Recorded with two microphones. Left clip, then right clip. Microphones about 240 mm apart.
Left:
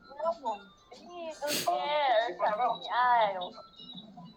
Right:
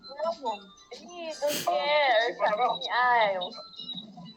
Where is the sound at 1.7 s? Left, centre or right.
Right.